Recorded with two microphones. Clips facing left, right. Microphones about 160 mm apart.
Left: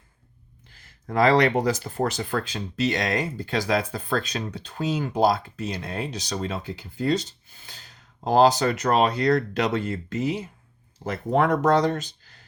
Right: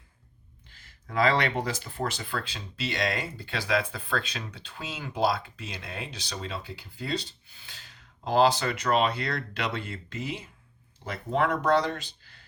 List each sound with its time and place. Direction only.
1.0 s speech: 40° left (ahead or behind)